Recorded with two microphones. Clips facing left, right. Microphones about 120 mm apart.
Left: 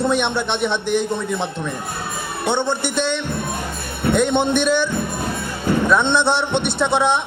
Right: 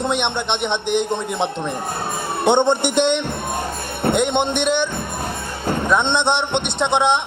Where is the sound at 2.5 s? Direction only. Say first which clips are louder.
Right 5 dB; 20° right (ahead or behind).